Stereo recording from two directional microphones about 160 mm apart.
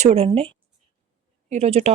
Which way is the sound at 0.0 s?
40° right (ahead or behind).